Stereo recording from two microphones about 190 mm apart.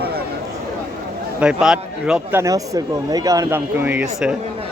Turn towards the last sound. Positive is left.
turn(degrees=-10)  # may be behind; listen again after turning